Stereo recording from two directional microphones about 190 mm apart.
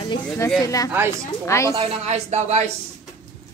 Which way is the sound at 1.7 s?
35° right (ahead or behind).